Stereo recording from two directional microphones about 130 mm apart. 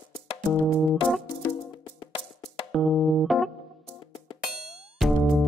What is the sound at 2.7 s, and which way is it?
Music, centre (ahead or behind).